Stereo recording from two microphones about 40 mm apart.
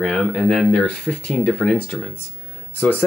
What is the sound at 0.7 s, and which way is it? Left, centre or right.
Speech, left.